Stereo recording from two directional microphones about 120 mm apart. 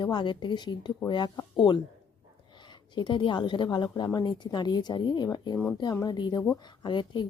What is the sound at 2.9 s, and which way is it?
A woman's voice, 40° left (ahead or behind).